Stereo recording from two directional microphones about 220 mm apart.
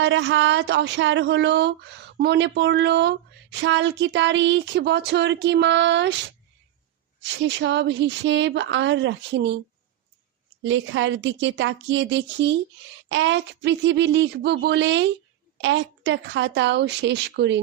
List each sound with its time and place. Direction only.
0.0 s speech: 55° right (ahead or behind)
7.2 s speech: 55° right (ahead or behind)
10.6 s a woman's voice: 60° right (ahead or behind)